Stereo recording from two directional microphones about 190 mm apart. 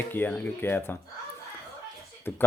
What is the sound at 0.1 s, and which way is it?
Speech, 10° left (ahead or behind).